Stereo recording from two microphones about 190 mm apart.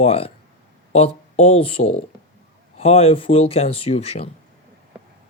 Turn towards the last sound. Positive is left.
turn(degrees=30)  # may be behind; listen again after turning